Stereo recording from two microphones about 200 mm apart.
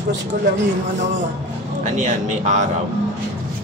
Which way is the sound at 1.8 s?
35° right (ahead or behind).